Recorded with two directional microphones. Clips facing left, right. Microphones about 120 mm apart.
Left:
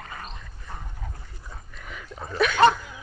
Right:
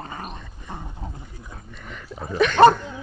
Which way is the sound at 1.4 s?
Centre (ahead or behind).